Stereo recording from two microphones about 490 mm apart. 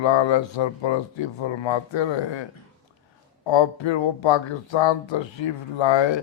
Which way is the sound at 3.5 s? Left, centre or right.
Left.